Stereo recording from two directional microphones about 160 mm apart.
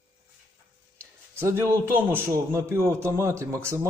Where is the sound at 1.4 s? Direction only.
15° right (ahead or behind).